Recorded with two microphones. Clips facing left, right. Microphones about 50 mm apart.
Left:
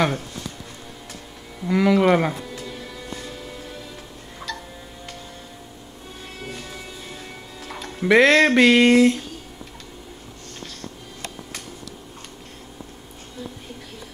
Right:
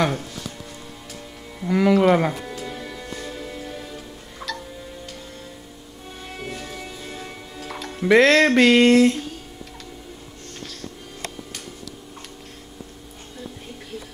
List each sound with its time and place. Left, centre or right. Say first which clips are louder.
1.7 s speech: even; centre
2.4 s music: right 2 dB; centre
4.4 s music: right 1 dB; centre
7.6 s speech: even; centre